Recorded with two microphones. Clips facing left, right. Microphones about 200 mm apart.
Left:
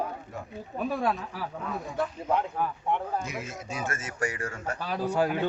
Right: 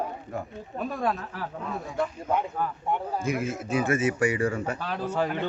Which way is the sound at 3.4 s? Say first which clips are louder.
Right 8 dB; 60° right (ahead or behind).